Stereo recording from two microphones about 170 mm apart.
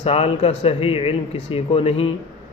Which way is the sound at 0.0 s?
35° left (ahead or behind).